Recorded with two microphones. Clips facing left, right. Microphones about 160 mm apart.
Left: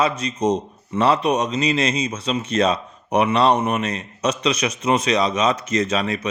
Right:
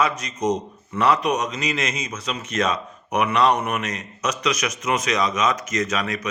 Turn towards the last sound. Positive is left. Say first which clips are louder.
# left 4 dB
turn(degrees=30)  # may be behind; listen again after turning